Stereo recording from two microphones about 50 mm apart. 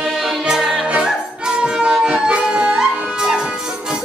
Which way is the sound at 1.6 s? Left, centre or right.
Centre.